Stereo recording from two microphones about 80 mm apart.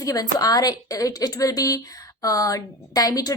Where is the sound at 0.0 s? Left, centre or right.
Left.